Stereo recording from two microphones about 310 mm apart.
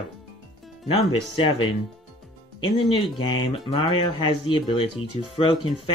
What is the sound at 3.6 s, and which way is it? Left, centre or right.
Speech, centre.